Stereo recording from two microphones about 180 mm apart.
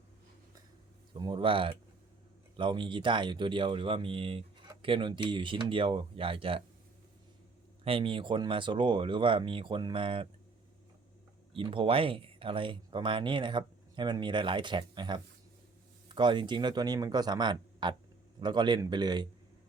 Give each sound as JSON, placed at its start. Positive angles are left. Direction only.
{"t": 1.1, "sound": "speech", "side_deg": -25}
{"t": 7.9, "sound": "speech", "side_deg": -30}
{"t": 11.5, "sound": "speech", "side_deg": -30}